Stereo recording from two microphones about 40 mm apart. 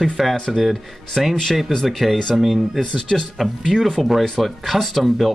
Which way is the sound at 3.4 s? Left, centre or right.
Centre.